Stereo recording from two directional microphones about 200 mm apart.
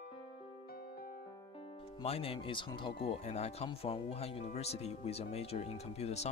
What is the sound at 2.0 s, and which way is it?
Speech, 30° left (ahead or behind).